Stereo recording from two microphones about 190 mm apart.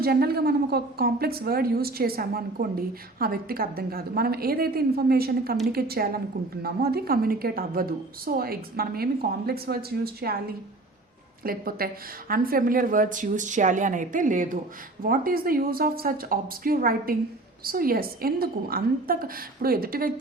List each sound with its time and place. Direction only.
0.0 s a woman's voice: 55° right (ahead or behind)